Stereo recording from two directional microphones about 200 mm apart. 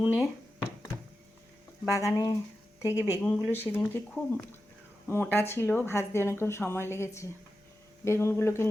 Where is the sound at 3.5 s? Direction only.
10° left (ahead or behind).